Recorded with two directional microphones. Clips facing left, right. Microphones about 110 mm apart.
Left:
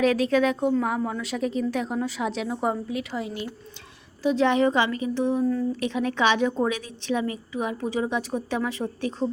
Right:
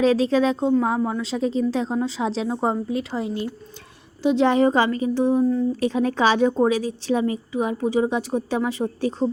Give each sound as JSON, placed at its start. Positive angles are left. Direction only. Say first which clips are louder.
{"t": 0.0, "sound": "a woman's voice", "louder": "right 3 dB", "side_deg": -30}